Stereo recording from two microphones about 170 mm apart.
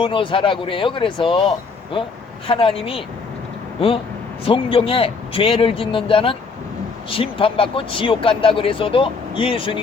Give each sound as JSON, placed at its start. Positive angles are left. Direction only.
{"t": 0.0, "sound": "speech", "side_deg": 30}